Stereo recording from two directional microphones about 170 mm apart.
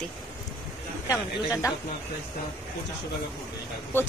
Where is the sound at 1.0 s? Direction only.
20° left (ahead or behind).